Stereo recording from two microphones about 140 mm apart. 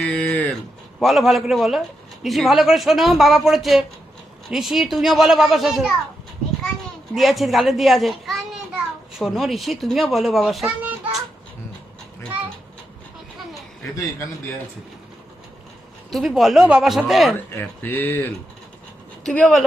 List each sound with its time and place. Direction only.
0.0 s a sound: 10° left (ahead or behind)
0.9 s speech: centre (ahead or behind)
7.2 s a child's voice: centre (ahead or behind)
13.9 s a man's voice: 25° left (ahead or behind)
16.0 s speech: centre (ahead or behind)
17.3 s speech: 15° left (ahead or behind)